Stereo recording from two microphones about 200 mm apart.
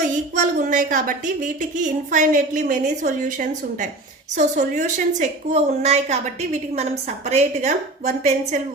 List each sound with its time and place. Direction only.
0.3 s a woman's voice: 40° right (ahead or behind)